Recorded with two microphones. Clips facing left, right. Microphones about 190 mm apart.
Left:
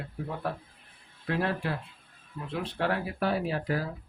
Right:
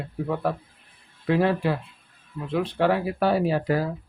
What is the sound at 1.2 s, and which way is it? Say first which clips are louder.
Speech: right 8 dB; 90° right.